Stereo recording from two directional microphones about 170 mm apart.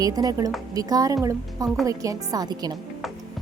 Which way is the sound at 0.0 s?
20° right (ahead or behind).